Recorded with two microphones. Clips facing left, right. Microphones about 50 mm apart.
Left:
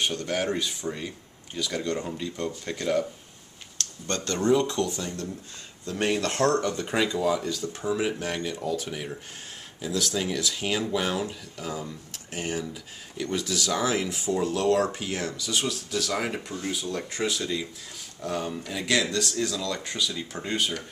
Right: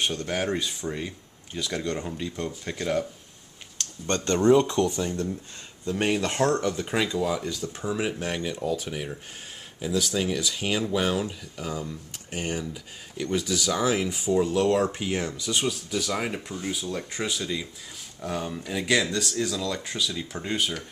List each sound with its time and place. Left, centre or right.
0.2 s speech: centre
3.7 s speech: right; by 20.8 s centre